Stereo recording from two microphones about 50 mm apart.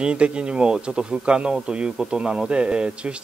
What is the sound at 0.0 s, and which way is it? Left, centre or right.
Speech, right.